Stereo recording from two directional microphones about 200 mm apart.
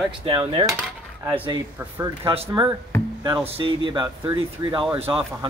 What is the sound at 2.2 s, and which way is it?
Speech, 30° right (ahead or behind).